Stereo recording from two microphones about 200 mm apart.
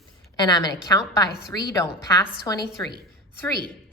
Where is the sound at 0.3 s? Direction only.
20° left (ahead or behind).